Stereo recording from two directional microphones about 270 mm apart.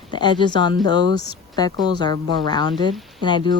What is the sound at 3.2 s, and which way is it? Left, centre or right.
Speech, centre.